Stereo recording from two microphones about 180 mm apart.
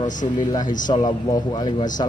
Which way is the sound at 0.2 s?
30° left (ahead or behind).